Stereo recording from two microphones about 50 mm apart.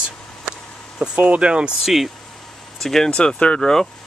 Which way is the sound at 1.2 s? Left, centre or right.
Right.